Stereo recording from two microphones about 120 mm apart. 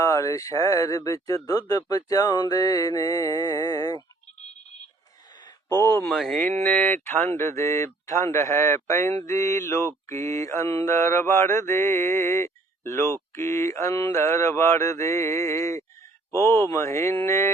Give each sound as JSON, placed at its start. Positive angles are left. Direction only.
{"t": 0.0, "sound": "speech", "side_deg": 25}
{"t": 5.8, "sound": "speech", "side_deg": 20}
{"t": 6.1, "sound": "speech", "side_deg": 0}
{"t": 6.6, "sound": "speech", "side_deg": 15}